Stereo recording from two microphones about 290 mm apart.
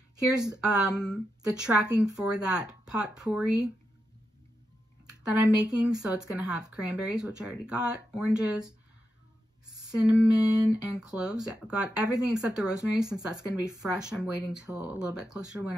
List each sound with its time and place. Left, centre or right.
0.4 s speech: centre
0.9 s speech: centre
5.3 s speech: centre
9.8 s speech: centre